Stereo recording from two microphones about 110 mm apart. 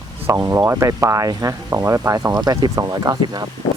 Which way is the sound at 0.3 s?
25° right (ahead or behind).